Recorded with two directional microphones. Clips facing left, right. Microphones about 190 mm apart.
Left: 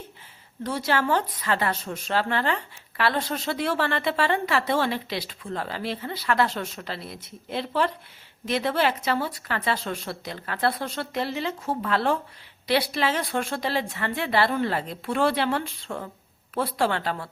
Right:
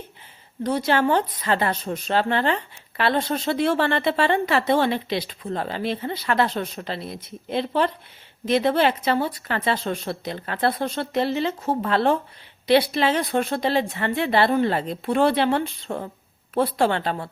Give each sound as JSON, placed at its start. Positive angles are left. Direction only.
{"t": 0.6, "sound": "a woman's voice", "side_deg": -20}